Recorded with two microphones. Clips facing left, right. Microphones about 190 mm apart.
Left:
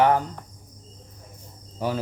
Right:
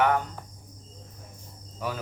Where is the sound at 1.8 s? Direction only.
30° left (ahead or behind).